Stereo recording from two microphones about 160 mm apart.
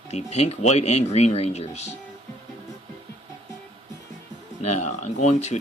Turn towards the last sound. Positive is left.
turn(degrees=45)  # may be behind; listen again after turning